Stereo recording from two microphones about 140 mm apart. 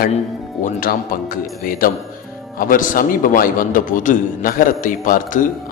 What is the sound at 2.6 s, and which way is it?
A man's voice, 80° left.